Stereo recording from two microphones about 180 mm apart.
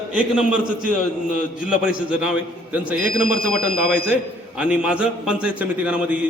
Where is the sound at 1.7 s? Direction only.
5° right (ahead or behind).